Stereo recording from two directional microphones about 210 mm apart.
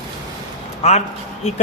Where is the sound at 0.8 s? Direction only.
30° left (ahead or behind).